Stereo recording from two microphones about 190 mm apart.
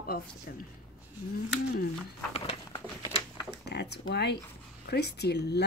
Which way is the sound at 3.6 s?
60° left (ahead or behind).